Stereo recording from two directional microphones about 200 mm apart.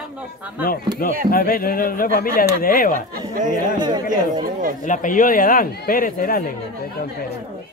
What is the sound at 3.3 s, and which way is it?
Speech, 40° right (ahead or behind).